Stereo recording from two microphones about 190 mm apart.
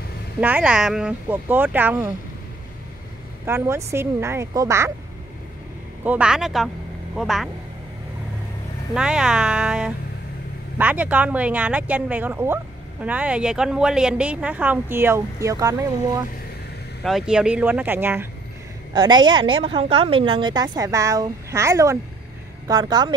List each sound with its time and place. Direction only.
0.4 s a woman's voice: 5° right (ahead or behind)
3.4 s a woman's voice: 15° right (ahead or behind)
6.0 s speech: 5° right (ahead or behind)
8.9 s a woman's voice: 5° right (ahead or behind)
17.0 s a woman's voice: centre (ahead or behind)
18.9 s a woman's voice: 25° right (ahead or behind)